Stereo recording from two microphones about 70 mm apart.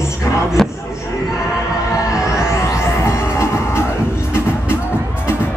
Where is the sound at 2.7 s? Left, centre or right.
Left.